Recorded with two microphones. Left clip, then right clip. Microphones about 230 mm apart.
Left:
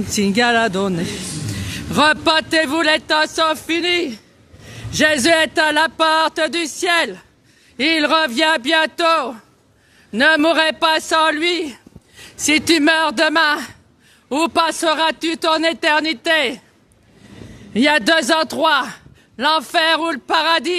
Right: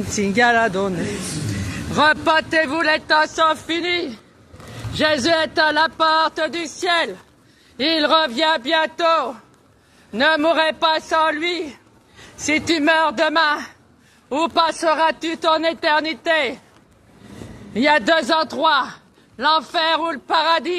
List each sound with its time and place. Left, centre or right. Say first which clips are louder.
0.1 s a man's voice: even; left
17.7 s a man's voice: left 1 dB; left